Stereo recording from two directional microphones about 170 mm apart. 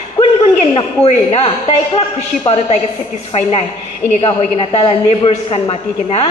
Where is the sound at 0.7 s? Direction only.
35° left (ahead or behind).